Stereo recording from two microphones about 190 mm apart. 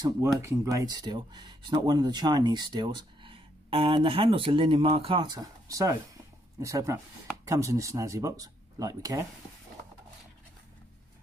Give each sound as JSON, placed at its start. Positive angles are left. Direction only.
{"t": 0.4, "sound": "speech", "side_deg": -15}